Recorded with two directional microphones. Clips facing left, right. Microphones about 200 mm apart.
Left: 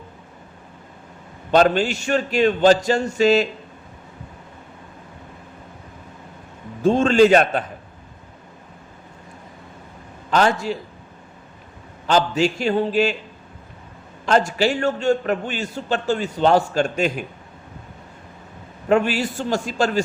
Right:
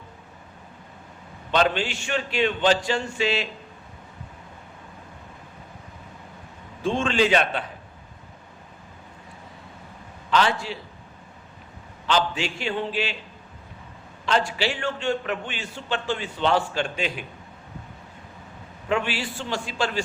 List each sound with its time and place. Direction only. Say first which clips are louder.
1.5 s a man's voice: left 6 dB; 45° left (ahead or behind)
6.8 s a man's voice: left 8 dB; 40° left (ahead or behind)
10.2 s a man's voice: left 4 dB; 45° left (ahead or behind)
12.0 s a man's voice: left 6 dB; 40° left (ahead or behind)
14.3 s a man's voice: left 6 dB; 45° left (ahead or behind)
18.9 s a man's voice: left 7 dB; 45° left (ahead or behind)